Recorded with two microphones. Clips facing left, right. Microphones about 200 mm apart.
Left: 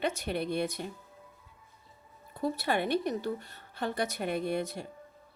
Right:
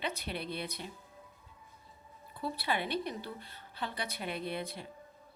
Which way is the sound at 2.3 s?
45° left (ahead or behind).